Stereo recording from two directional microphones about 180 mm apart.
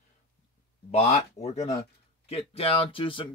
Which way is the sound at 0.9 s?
35° left (ahead or behind).